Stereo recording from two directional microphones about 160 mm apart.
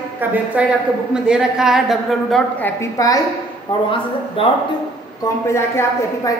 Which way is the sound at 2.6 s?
20° left (ahead or behind).